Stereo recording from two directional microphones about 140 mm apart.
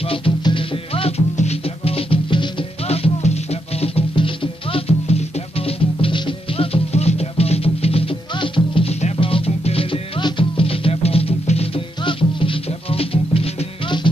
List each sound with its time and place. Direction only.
0.1 s music: 35° left (ahead or behind)